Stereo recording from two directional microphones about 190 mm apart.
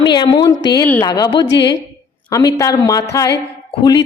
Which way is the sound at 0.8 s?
10° left (ahead or behind).